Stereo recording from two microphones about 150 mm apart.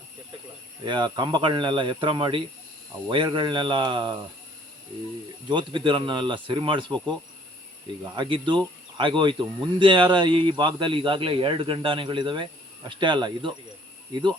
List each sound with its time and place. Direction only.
0.9 s speech: 30° right (ahead or behind)
5.5 s speech: 30° right (ahead or behind)
8.0 s speech: 30° right (ahead or behind)